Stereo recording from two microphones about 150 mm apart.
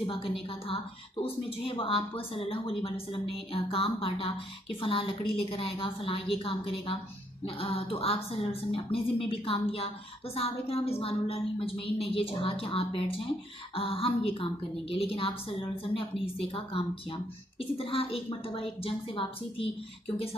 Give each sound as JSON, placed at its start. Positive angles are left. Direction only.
{"t": 0.0, "sound": "a woman's voice", "side_deg": 40}